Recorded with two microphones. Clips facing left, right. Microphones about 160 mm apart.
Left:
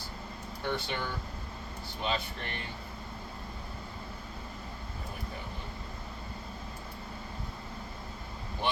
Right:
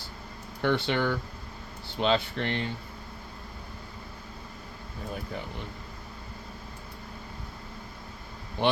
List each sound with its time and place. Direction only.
0.6 s speech: 70° right (ahead or behind)